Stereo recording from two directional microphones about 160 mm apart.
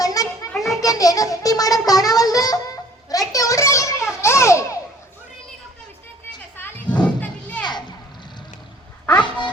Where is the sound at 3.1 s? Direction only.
20° left (ahead or behind).